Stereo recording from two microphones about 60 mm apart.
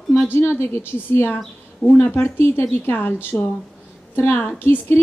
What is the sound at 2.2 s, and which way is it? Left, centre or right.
Speech, left.